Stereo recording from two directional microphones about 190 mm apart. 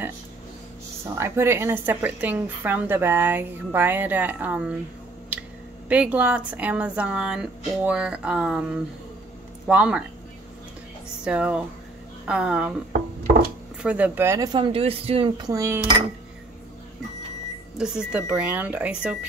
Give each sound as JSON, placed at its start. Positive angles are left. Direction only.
{"t": 1.1, "sound": "speech", "side_deg": -15}
{"t": 5.3, "sound": "a sound", "side_deg": -5}
{"t": 5.9, "sound": "speech", "side_deg": -5}
{"t": 11.2, "sound": "speech", "side_deg": -5}
{"t": 13.8, "sound": "a woman's voice", "side_deg": -5}
{"t": 17.7, "sound": "speech", "side_deg": -5}